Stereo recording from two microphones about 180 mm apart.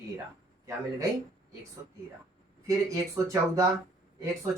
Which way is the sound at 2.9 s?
20° right (ahead or behind).